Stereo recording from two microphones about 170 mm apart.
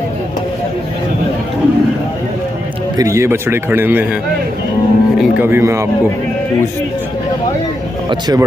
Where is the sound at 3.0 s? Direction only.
15° right (ahead or behind).